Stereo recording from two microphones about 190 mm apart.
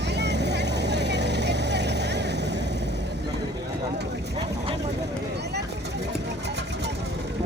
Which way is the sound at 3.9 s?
60° right (ahead or behind).